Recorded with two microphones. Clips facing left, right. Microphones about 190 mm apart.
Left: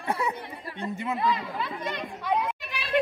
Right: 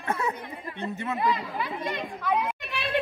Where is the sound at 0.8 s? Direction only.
15° left (ahead or behind).